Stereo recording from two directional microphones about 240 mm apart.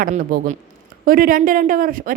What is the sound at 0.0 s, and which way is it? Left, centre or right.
A woman's voice, right.